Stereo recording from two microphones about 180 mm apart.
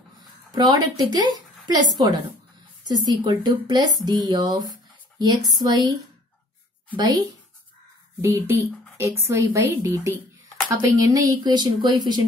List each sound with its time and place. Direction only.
0.6 s speech: 20° right (ahead or behind)
7.0 s a woman's voice: 20° right (ahead or behind)